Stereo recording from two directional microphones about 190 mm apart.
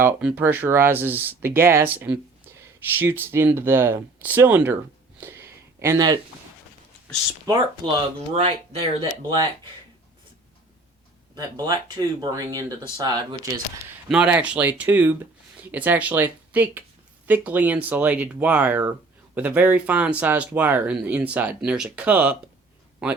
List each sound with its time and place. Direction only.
0.0 s speech: 5° right (ahead or behind)
5.2 s a sound: 15° right (ahead or behind)
7.8 s speech: 25° right (ahead or behind)
8.3 s speech: 35° right (ahead or behind)
11.3 s speech: 20° right (ahead or behind)
14.1 s speech: 5° right (ahead or behind)